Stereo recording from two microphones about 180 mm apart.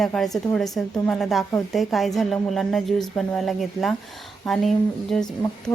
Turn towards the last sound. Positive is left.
turn(degrees=0)  # may be behind; listen again after turning